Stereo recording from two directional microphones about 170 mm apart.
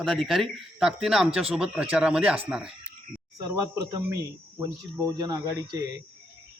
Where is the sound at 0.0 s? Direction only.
Centre (ahead or behind).